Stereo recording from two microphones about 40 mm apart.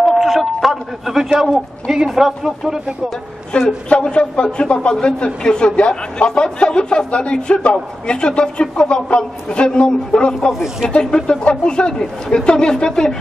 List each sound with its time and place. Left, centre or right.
0.0 s a man's voice: centre
3.5 s a man's voice: left